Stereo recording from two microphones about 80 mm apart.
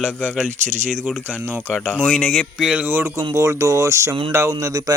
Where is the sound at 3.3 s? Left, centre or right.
Right.